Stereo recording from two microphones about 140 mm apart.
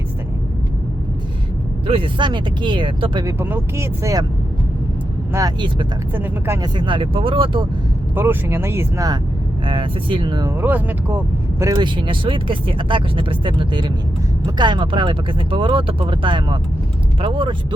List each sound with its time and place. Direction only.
1.9 s speech: 35° right (ahead or behind)
3.2 s speech: 15° right (ahead or behind)
6.1 s speech: 15° right (ahead or behind)
6.6 s speech: 35° right (ahead or behind)
8.1 s speech: 15° right (ahead or behind)
9.6 s speech: 40° right (ahead or behind)
10.6 s speech: 15° right (ahead or behind)
11.7 s speech: 35° right (ahead or behind)